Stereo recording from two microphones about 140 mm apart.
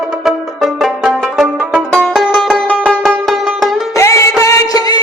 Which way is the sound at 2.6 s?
10° right (ahead or behind).